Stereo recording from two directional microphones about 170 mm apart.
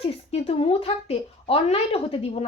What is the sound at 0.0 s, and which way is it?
A woman's voice, 35° left (ahead or behind).